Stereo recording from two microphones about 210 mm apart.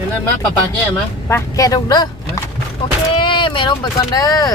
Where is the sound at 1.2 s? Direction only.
15° left (ahead or behind).